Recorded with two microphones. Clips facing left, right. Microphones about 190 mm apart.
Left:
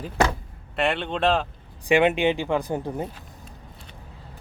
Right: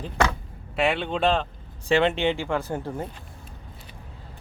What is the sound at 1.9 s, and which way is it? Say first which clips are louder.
Speech: left 2 dB; 15° left (ahead or behind).